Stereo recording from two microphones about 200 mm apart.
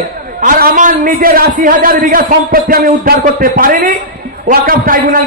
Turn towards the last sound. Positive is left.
turn(degrees=-45)  # may be behind; listen again after turning